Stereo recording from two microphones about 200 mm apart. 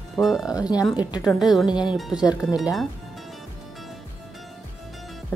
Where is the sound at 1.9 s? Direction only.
Centre (ahead or behind).